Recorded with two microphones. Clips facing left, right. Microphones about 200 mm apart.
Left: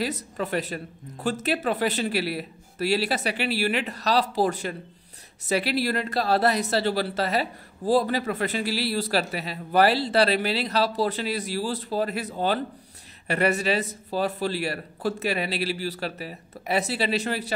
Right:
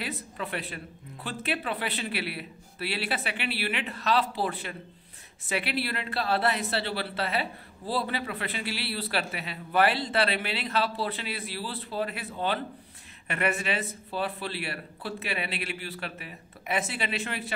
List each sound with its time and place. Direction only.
0.0 s speech: 40° left (ahead or behind)